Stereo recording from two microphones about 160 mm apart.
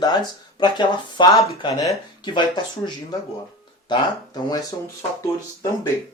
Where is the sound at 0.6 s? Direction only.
30° left (ahead or behind).